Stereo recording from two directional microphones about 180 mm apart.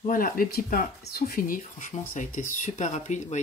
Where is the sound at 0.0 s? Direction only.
50° left (ahead or behind).